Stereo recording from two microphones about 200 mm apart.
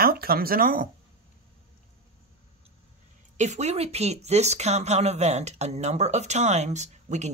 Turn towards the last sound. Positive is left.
turn(degrees=-35)  # may be behind; listen again after turning